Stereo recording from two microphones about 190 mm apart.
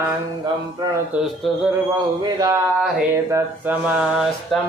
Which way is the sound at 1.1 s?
5° right (ahead or behind).